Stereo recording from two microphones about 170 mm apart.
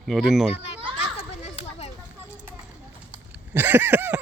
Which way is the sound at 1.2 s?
40° left (ahead or behind).